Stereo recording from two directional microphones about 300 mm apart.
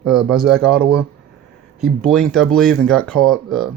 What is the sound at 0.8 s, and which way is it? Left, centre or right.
Speech, right.